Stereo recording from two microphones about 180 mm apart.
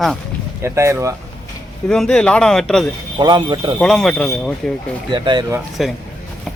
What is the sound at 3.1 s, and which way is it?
Speech, 25° right (ahead or behind).